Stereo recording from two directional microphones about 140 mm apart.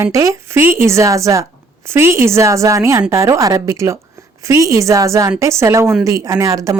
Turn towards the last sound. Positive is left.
turn(degrees=-25)  # may be behind; listen again after turning